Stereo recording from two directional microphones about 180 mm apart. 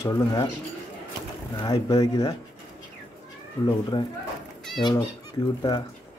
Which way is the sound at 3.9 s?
25° left (ahead or behind).